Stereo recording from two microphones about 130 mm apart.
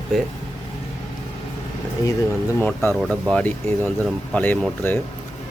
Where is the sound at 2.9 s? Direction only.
5° left (ahead or behind).